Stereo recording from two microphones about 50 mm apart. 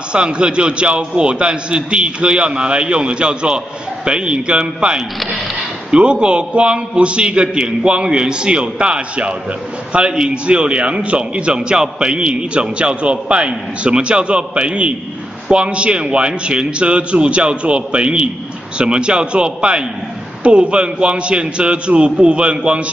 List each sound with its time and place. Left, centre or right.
0.1 s a man's voice: centre